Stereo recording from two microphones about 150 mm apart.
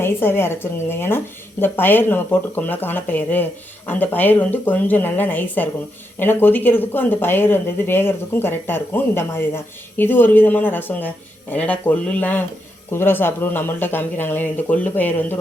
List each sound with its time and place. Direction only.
0.0 s speech: 15° left (ahead or behind)